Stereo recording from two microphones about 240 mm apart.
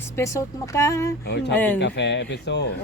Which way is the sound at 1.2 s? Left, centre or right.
Left.